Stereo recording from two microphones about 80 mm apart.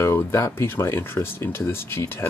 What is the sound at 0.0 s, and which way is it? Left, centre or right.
Speech, left.